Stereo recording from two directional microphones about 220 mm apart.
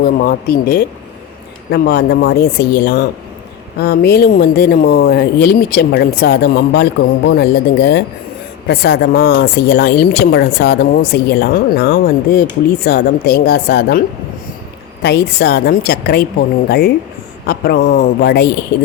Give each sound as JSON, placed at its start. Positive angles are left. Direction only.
{"t": 0.0, "sound": "speech", "side_deg": 45}
{"t": 15.0, "sound": "speech", "side_deg": 50}